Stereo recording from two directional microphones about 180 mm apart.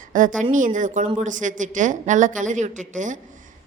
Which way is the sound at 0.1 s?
45° right (ahead or behind).